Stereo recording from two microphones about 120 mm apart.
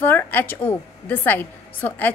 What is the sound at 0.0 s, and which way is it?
A woman's voice, 15° left (ahead or behind).